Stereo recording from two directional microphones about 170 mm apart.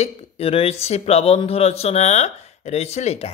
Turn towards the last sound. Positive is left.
turn(degrees=40)  # may be behind; listen again after turning